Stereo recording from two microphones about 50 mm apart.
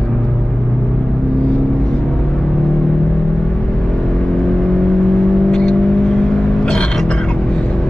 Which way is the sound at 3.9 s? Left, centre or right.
Centre.